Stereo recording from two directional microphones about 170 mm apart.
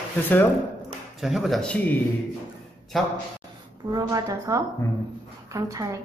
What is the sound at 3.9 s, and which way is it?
A woman's voice, 20° right (ahead or behind).